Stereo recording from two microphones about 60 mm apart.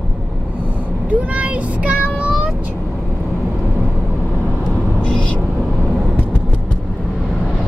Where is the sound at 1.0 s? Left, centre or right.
Right.